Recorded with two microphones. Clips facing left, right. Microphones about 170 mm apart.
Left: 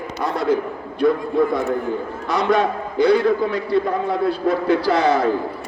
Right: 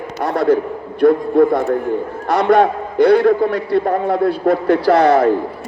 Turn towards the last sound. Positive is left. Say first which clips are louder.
# right 5 dB
turn(degrees=-65)  # may be behind; listen again after turning